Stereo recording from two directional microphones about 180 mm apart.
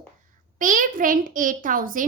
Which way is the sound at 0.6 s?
45° right (ahead or behind).